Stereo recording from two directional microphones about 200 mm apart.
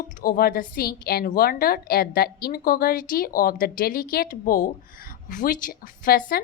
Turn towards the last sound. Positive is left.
turn(degrees=45)  # may be behind; listen again after turning